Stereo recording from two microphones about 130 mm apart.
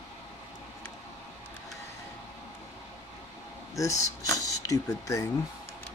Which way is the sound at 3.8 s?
25° left (ahead or behind).